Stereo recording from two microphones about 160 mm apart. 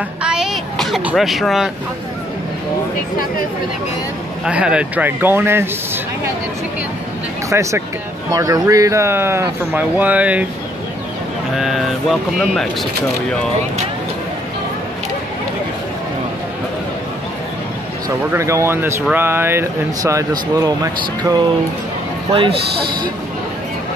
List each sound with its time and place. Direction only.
0.2 s speech: 5° right (ahead or behind)
4.5 s speech: 5° right (ahead or behind)
7.4 s speech: 20° right (ahead or behind)
11.5 s speech: centre (ahead or behind)
18.3 s speech: 20° right (ahead or behind)